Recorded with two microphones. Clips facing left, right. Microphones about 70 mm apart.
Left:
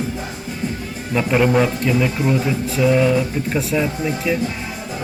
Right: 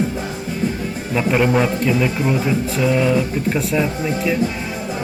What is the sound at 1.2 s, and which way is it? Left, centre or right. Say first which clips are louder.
Speech: left 1 dB; centre.